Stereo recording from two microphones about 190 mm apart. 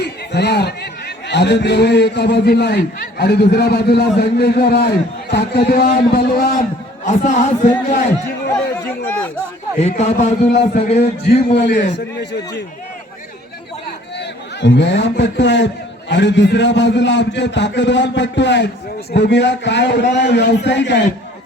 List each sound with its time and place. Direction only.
0.0 s a man's voice: 60° left (ahead or behind)
7.0 s a man's voice: 40° left (ahead or behind)
10.0 s a man's voice: 35° left (ahead or behind)
11.5 s speech: 60° left (ahead or behind)
14.2 s a man's voice: 65° left (ahead or behind)